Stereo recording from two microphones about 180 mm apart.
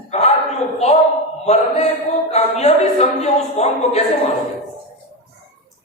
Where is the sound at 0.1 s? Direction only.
40° left (ahead or behind).